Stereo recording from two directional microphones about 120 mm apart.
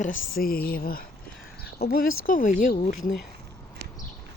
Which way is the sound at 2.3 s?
90° left.